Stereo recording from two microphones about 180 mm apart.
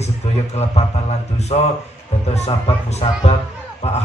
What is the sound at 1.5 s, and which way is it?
A man's voice, 35° left (ahead or behind).